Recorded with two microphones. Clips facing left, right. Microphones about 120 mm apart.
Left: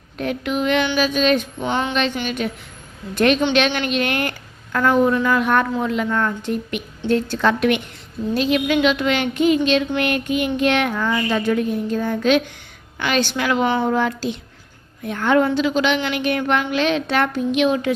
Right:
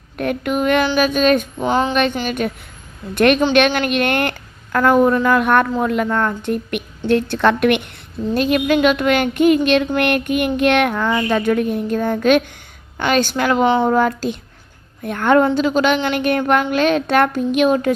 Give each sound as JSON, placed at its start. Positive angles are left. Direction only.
{"t": 0.2, "sound": "a woman's voice", "side_deg": -50}
{"t": 2.4, "sound": "a woman's voice", "side_deg": -50}
{"t": 3.2, "sound": "a child's voice", "side_deg": -60}
{"t": 8.3, "sound": "a woman's voice", "side_deg": -50}
{"t": 13.9, "sound": "a woman's voice", "side_deg": -50}